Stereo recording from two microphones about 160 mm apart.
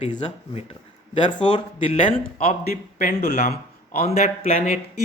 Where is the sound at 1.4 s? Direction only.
30° left (ahead or behind).